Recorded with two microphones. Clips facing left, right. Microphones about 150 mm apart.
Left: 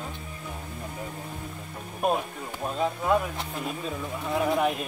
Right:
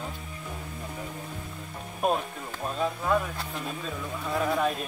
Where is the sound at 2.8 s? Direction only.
20° left (ahead or behind).